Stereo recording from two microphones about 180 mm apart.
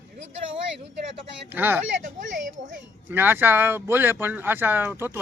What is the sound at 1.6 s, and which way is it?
Speech, 10° right (ahead or behind).